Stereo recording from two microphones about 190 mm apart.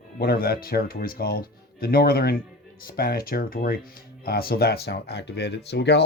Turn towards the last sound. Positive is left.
turn(degrees=65)  # may be behind; listen again after turning